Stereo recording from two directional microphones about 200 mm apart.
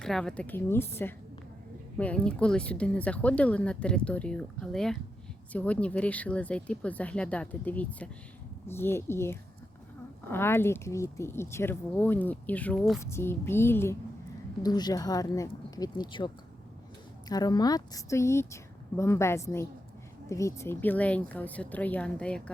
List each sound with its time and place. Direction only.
0.0 s speech: 5° left (ahead or behind)